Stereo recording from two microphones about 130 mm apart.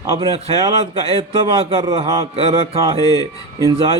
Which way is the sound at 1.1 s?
50° right (ahead or behind).